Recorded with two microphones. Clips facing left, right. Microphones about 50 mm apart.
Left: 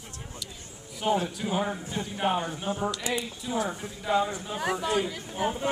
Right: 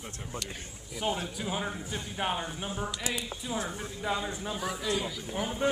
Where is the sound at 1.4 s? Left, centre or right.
Left.